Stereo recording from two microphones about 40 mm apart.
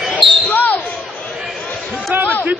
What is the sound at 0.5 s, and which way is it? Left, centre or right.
Basketball bounce, left.